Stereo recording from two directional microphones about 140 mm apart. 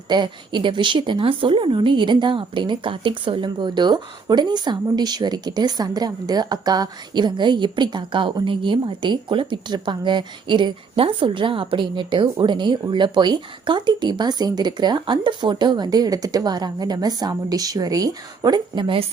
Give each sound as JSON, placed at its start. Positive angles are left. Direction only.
{"t": 0.1, "sound": "a woman's voice", "side_deg": -35}